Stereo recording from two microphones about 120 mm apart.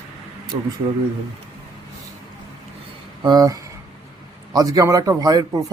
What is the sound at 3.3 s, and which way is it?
Speech, 30° right (ahead or behind).